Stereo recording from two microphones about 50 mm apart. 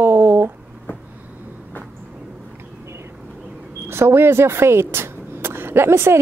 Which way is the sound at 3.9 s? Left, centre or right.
Right.